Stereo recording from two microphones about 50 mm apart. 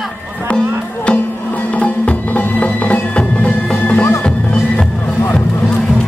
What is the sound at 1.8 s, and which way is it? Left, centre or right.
Music, left.